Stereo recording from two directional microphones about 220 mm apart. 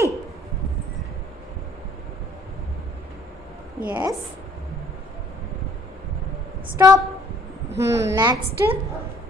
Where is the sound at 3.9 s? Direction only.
15° right (ahead or behind).